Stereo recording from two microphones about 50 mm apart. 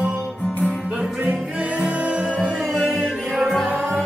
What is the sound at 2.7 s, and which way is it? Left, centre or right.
Music, centre.